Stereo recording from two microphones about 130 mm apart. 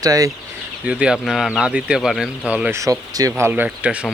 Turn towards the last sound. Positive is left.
turn(degrees=-10)  # may be behind; listen again after turning